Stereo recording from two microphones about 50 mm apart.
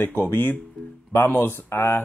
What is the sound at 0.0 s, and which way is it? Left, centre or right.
Speech, left.